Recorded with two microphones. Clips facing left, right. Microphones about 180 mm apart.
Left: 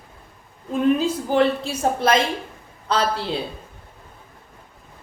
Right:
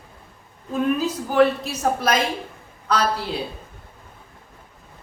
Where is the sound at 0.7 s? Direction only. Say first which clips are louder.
Left 3 dB; 30° left (ahead or behind).